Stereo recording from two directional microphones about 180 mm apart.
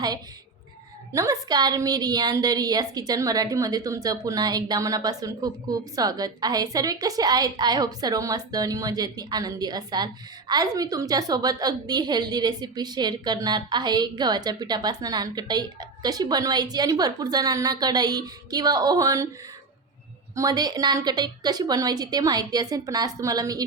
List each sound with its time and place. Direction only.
1.1 s a woman's voice: 20° right (ahead or behind)
20.3 s a woman's voice: 20° right (ahead or behind)